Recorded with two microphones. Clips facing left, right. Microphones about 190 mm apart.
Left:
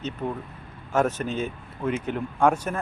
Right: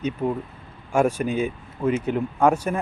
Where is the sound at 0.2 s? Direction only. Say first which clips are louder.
Right 5 dB; 10° right (ahead or behind).